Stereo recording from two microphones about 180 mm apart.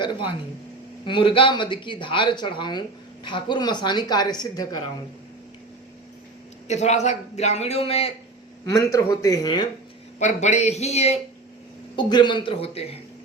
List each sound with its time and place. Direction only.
0.0 s speech: 25° left (ahead or behind)
6.7 s a man's voice: 40° left (ahead or behind)
8.7 s speech: 15° left (ahead or behind)
10.2 s a man's voice: 40° left (ahead or behind)
11.9 s speech: 25° left (ahead or behind)